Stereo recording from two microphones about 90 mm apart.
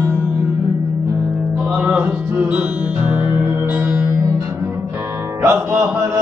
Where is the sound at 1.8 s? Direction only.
20° right (ahead or behind).